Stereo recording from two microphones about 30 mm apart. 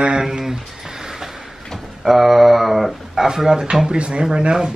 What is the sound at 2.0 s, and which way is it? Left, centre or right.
Mantra, centre.